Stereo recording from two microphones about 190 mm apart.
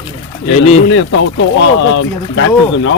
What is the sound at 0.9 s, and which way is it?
Speech, 80° left.